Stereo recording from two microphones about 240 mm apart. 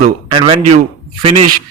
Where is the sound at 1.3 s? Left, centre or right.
Right.